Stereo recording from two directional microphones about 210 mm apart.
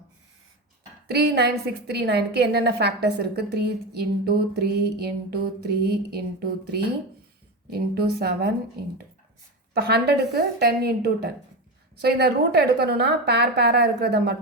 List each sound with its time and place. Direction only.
1.0 s a woman's voice: 50° right (ahead or behind)
7.9 s a woman's voice: 50° right (ahead or behind)
9.7 s a woman's voice: 50° right (ahead or behind)